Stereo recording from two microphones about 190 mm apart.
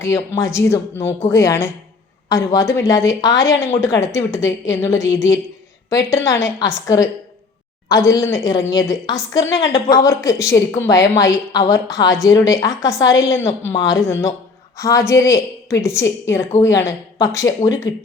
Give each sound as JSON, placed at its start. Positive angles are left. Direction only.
{"t": 0.0, "sound": "a woman's voice", "side_deg": 15}